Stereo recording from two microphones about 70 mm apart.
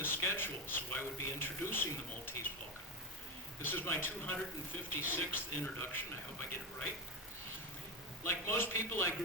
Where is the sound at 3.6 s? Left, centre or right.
Left.